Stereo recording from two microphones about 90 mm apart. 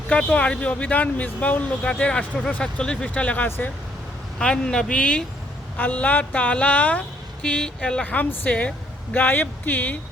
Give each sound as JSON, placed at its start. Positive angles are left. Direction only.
{"t": 0.1, "sound": "speech", "side_deg": 15}